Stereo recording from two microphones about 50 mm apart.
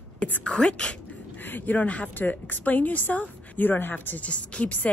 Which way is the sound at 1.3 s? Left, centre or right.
Left.